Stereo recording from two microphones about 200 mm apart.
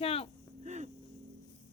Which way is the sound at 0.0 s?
30° left (ahead or behind).